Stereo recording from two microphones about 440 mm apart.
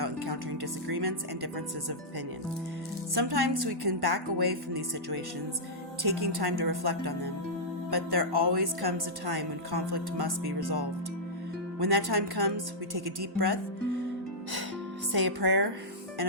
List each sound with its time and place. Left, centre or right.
0.0 s speech: right
3.2 s a woman's voice: right
15.1 s a woman's voice: right